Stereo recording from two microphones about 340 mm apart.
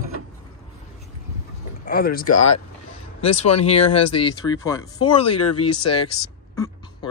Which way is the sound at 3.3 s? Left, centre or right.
Centre.